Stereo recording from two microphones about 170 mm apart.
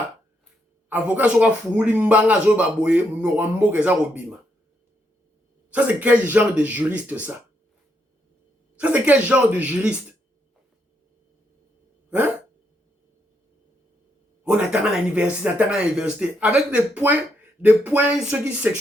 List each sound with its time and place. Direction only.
0.9 s speech: 10° right (ahead or behind)
5.7 s speech: 10° right (ahead or behind)
8.8 s speech: 10° right (ahead or behind)
14.4 s speech: 5° right (ahead or behind)